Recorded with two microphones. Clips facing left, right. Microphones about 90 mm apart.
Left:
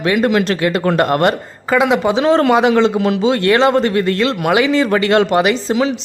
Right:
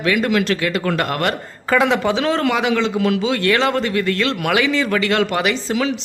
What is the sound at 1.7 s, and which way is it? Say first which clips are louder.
Speech: left 3 dB; 10° left (ahead or behind).